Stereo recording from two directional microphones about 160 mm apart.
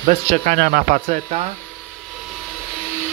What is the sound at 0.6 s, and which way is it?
Speech, 65° right (ahead or behind).